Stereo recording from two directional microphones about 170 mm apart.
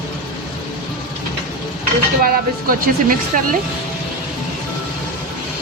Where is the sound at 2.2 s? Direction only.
60° right (ahead or behind).